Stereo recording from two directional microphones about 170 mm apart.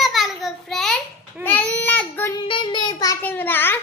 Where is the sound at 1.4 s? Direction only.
10° left (ahead or behind).